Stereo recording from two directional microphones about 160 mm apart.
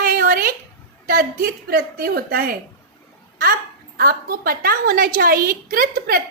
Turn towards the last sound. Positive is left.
turn(degrees=-65)  # may be behind; listen again after turning